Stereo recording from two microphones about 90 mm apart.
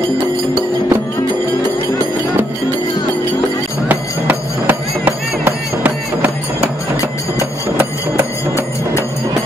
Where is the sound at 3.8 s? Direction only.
20° right (ahead or behind).